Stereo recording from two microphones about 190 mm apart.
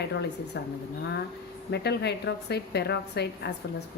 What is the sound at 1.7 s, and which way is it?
A woman's voice, 60° left (ahead or behind).